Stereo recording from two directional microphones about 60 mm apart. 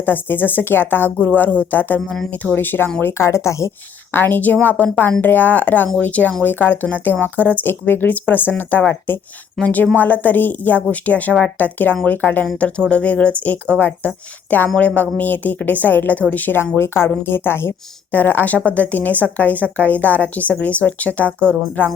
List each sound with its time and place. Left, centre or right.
0.0 s speech: left
3.0 s speech: left
4.1 s speech: left
16.7 s speech: left